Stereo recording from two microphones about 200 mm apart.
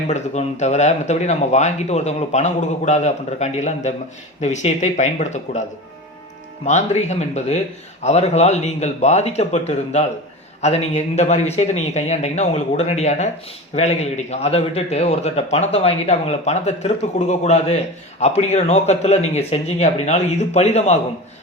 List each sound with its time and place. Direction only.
0.1 s a man's voice: 35° left (ahead or behind)
6.7 s a man's voice: 35° left (ahead or behind)